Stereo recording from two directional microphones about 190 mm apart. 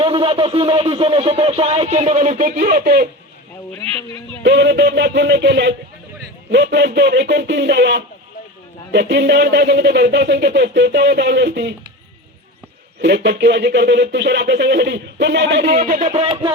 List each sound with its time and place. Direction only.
0.0 s speech: 25° right (ahead or behind); by 3.1 s 50° right (ahead or behind)
4.4 s speech: 65° right (ahead or behind)
13.0 s speech: 65° right (ahead or behind)
15.8 s speech: 45° right (ahead or behind)